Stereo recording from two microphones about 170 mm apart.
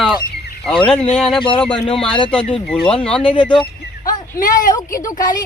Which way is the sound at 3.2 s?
30° left (ahead or behind).